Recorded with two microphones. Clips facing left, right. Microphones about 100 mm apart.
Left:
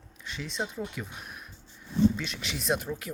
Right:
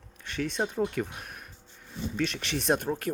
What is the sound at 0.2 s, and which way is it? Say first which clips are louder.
Speech: right 5 dB; 55° right (ahead or behind).